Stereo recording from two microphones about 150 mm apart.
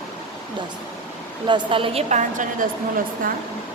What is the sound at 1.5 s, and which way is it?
A woman's voice, 35° right (ahead or behind).